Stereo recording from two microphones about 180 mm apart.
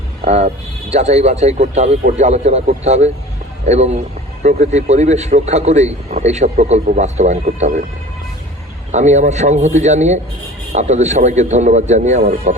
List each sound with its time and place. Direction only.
0.3 s a man's voice: 35° right (ahead or behind)
8.9 s a man's voice: 40° right (ahead or behind)